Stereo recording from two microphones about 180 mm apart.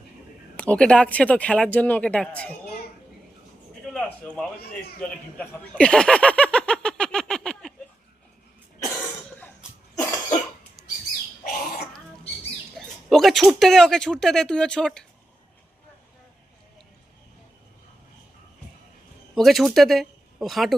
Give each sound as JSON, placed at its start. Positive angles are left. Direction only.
{"t": 0.6, "sound": "speech", "side_deg": 5}
{"t": 3.9, "sound": "a sound", "side_deg": 5}
{"t": 9.9, "sound": "cough", "side_deg": 20}
{"t": 11.4, "sound": "a sound", "side_deg": 55}
{"t": 12.7, "sound": "speech", "side_deg": 0}
{"t": 19.3, "sound": "speech", "side_deg": 0}